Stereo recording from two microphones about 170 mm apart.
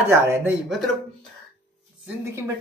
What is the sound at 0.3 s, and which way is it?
Speech, 10° right (ahead or behind).